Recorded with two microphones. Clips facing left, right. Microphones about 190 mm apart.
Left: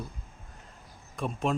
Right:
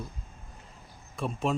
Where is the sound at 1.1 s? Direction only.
Centre (ahead or behind).